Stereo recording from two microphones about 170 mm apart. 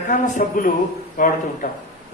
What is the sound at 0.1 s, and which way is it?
A man's voice, 50° left (ahead or behind).